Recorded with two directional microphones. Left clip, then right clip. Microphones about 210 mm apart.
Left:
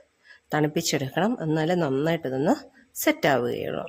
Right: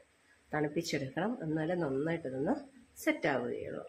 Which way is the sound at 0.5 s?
55° left (ahead or behind).